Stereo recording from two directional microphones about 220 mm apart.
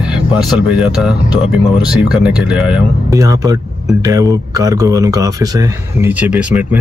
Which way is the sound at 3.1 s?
15° right (ahead or behind).